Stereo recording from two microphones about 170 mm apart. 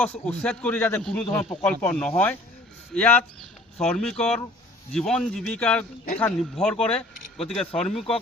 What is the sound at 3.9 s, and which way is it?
Speech, 5° left (ahead or behind).